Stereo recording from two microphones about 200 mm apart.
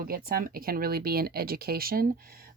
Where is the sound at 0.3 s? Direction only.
45° right (ahead or behind).